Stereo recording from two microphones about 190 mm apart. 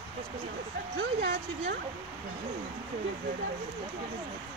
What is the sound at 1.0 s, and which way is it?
Speech, 60° right (ahead or behind).